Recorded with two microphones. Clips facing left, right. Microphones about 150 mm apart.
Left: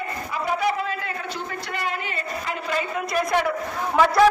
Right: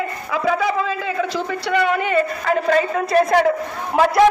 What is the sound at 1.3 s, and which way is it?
A woman's voice, 75° right (ahead or behind).